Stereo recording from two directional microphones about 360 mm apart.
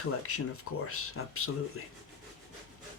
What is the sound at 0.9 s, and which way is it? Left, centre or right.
Speech, left.